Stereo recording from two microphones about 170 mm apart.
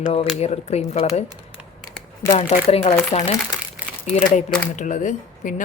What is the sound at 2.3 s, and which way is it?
Speech, 40° left (ahead or behind).